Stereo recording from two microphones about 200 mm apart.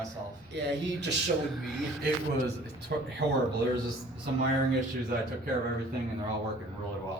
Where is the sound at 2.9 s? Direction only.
55° right (ahead or behind).